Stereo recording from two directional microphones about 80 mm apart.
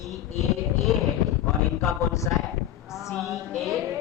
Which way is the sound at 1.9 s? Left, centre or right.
Left.